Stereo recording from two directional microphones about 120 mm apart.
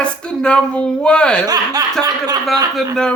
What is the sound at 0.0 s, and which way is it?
A woman's voice, 10° left (ahead or behind).